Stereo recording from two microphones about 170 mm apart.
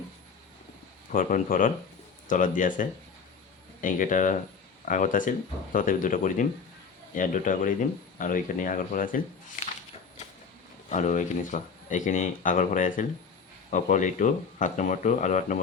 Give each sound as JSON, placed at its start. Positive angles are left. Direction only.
{"t": 1.1, "sound": "speech", "side_deg": 55}
{"t": 10.8, "sound": "speech", "side_deg": 45}